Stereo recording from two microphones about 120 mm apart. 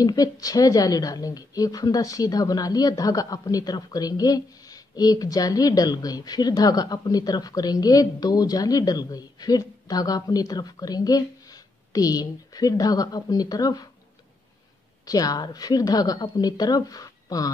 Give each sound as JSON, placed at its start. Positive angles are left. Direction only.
{"t": 0.0, "sound": "a woman's voice", "side_deg": 30}
{"t": 15.0, "sound": "a woman's voice", "side_deg": 30}